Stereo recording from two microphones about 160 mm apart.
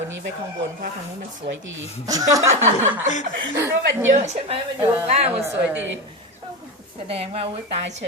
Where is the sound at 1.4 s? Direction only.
30° right (ahead or behind).